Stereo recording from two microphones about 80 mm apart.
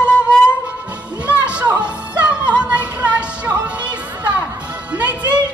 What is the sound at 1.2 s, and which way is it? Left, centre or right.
Music, centre.